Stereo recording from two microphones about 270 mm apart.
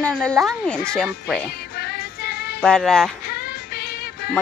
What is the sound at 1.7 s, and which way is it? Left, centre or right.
Music, left.